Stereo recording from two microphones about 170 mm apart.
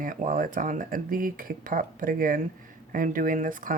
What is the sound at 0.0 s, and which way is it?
Speech, 50° right (ahead or behind).